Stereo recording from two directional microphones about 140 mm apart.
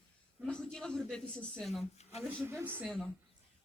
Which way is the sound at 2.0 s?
50° left (ahead or behind).